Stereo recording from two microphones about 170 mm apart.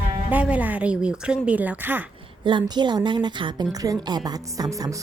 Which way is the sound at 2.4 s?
25° right (ahead or behind).